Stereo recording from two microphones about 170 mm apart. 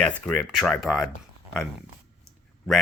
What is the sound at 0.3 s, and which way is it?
Speech, 5° left (ahead or behind).